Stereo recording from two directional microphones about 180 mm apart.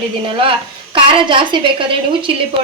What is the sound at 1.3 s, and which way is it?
Speech, 30° right (ahead or behind).